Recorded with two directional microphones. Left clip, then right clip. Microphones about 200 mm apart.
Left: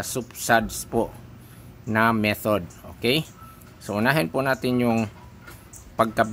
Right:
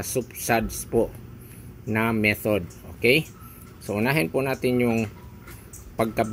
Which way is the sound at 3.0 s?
65° left (ahead or behind).